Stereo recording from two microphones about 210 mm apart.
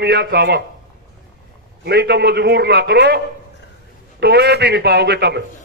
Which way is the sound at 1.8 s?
50° right (ahead or behind).